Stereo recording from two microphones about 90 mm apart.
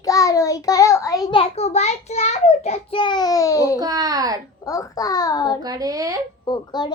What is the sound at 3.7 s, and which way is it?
Speech, 45° right (ahead or behind).